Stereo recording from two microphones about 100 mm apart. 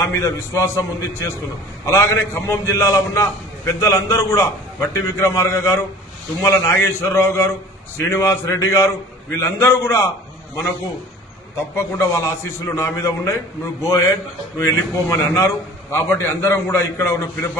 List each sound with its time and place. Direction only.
0.0 s a man's voice: 30° left (ahead or behind)
1.9 s a man's voice: 25° left (ahead or behind)
11.5 s a man's voice: 25° left (ahead or behind)